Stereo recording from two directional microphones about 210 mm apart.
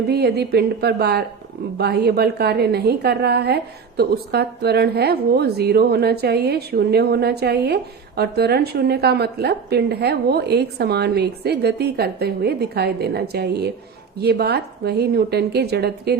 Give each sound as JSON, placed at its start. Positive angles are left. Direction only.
{"t": 0.1, "sound": "a woman's voice", "side_deg": -50}